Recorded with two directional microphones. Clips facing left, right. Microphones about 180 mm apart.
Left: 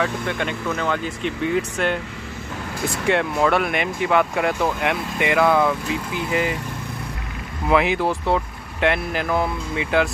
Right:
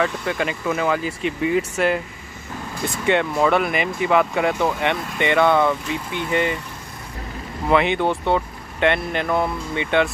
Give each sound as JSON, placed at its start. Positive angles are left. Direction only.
{"t": 0.0, "sound": "speech", "side_deg": 0}
{"t": 3.1, "sound": "speech", "side_deg": 0}
{"t": 7.7, "sound": "speech", "side_deg": 0}